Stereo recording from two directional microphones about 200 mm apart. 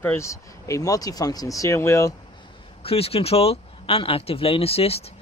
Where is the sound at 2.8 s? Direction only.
30° left (ahead or behind).